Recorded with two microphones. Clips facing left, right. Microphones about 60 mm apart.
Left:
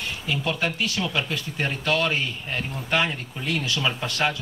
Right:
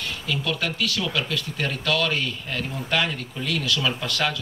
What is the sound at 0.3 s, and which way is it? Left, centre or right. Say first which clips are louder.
A man's voice: left 1 dB; left.